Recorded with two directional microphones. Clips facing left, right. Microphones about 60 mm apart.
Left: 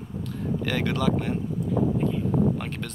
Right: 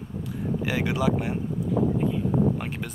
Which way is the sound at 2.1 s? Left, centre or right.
Centre.